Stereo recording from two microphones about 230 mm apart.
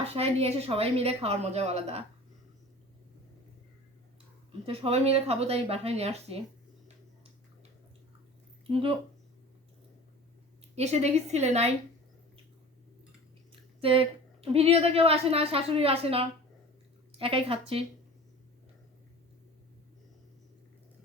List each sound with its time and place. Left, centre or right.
0.1 s a woman's voice: right
4.6 s a woman's voice: right
8.7 s a woman's voice: right
10.8 s a woman's voice: right
13.8 s a woman's voice: right